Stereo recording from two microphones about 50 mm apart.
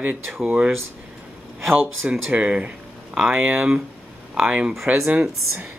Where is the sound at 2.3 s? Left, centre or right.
Right.